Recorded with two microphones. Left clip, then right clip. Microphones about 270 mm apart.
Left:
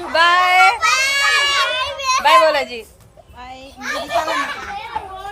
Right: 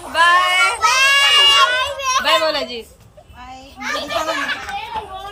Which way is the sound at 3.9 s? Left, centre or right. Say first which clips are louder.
Even; left.